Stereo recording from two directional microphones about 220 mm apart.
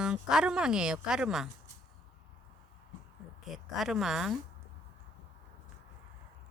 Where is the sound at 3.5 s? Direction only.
Centre (ahead or behind).